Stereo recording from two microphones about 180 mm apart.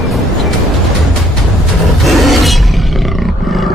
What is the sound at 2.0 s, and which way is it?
Roar, centre (ahead or behind).